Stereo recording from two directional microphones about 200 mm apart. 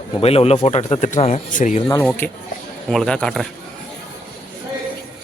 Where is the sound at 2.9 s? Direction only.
5° left (ahead or behind).